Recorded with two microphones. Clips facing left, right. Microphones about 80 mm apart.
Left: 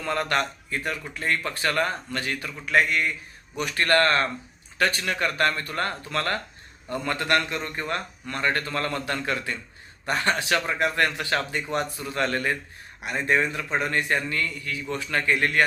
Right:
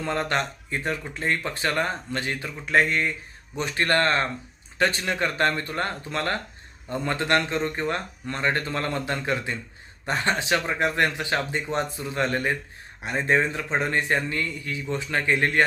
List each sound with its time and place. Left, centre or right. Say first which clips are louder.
0.0 s a man's voice: even; right